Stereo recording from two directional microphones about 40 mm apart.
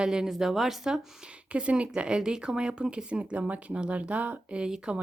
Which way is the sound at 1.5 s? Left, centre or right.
Right.